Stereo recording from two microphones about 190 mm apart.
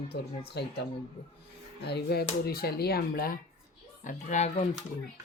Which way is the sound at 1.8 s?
60° left (ahead or behind).